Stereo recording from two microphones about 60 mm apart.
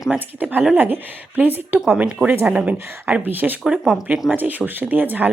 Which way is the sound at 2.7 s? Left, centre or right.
Right.